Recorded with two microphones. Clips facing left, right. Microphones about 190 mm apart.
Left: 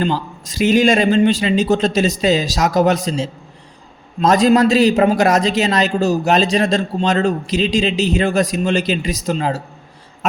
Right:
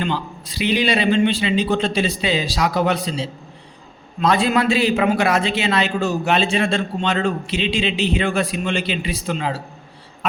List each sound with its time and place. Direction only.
0.0 s a man's voice: 40° left (ahead or behind)